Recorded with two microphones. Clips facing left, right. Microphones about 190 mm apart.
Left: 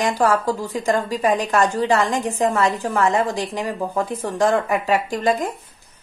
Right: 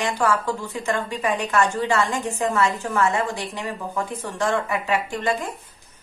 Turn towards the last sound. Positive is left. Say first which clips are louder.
# left 5 dB
turn(degrees=35)  # may be behind; listen again after turning